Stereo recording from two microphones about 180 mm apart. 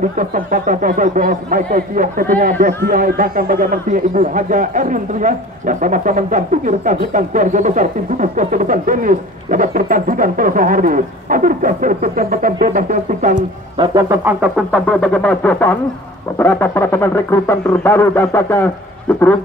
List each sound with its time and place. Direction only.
0.2 s speech: 50° right (ahead or behind)
13.7 s speech: 20° right (ahead or behind)
14.4 s speech: 5° left (ahead or behind)